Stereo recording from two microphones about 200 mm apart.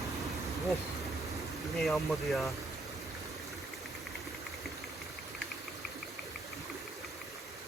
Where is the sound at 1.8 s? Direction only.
Centre (ahead or behind).